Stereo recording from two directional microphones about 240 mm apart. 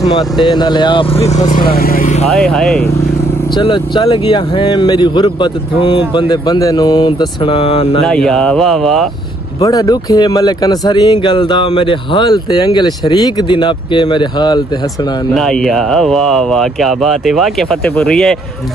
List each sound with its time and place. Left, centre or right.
0.5 s speech: centre; by 2.2 s left
2.2 s speech: centre
3.5 s speech: centre
8.1 s speech: centre
9.6 s speech: centre
15.3 s speech: centre